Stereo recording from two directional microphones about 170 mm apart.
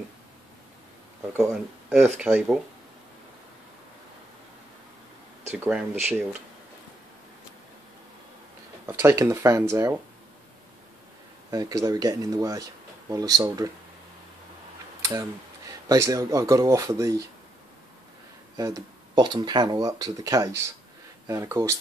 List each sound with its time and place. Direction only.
1.5 s speech: 5° right (ahead or behind)
5.5 s speech: 10° right (ahead or behind)
8.8 s speech: 15° right (ahead or behind)
11.5 s speech: 20° right (ahead or behind)
15.0 s a sound: 20° right (ahead or behind)
15.9 s speech: 20° right (ahead or behind)
18.6 s speech: 25° right (ahead or behind)